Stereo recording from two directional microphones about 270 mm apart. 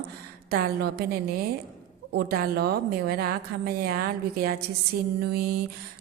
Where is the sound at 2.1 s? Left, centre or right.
Right.